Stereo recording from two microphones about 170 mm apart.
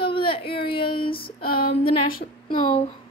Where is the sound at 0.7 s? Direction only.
30° left (ahead or behind).